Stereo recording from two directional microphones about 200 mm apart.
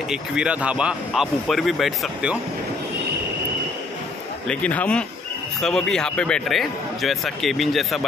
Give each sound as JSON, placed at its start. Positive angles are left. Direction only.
{"t": 0.1, "sound": "a man's voice", "side_deg": -5}
{"t": 4.5, "sound": "a man's voice", "side_deg": 5}